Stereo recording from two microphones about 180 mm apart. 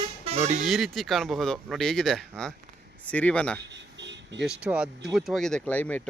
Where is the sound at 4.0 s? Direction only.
80° right.